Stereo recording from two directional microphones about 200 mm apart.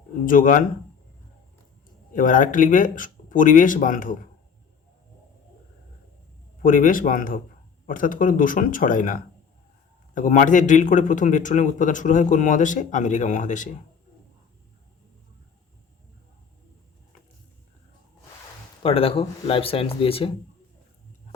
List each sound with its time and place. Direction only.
0.3 s a man's voice: 40° left (ahead or behind)
2.1 s a man's voice: 40° left (ahead or behind)
6.6 s a man's voice: 45° left (ahead or behind)
18.8 s speech: 30° left (ahead or behind)